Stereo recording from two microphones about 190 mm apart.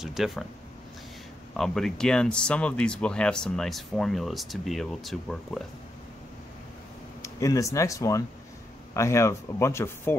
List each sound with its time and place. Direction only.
0.0 s speech: centre (ahead or behind)
1.6 s speech: centre (ahead or behind)
7.2 s speech: 15° left (ahead or behind)